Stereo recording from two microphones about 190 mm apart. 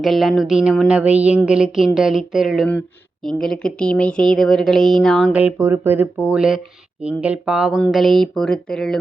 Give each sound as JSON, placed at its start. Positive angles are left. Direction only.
{"t": 0.0, "sound": "a woman's voice", "side_deg": 0}